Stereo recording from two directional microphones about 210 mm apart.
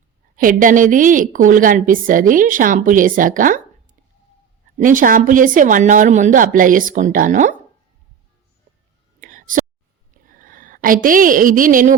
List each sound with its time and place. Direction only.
0.3 s a woman's voice: 40° right (ahead or behind)
4.8 s a woman's voice: 40° right (ahead or behind)
9.2 s whispering: 40° right (ahead or behind)
10.3 s a woman's voice: 40° right (ahead or behind)